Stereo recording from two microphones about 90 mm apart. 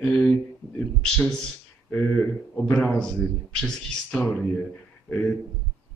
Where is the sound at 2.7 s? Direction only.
10° left (ahead or behind).